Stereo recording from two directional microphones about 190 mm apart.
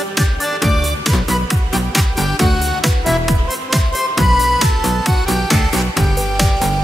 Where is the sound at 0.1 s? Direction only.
Centre (ahead or behind).